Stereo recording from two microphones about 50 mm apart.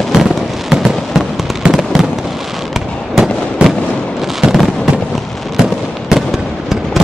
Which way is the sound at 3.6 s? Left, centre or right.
Right.